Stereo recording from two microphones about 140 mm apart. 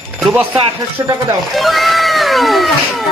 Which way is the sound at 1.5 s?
Centre (ahead or behind).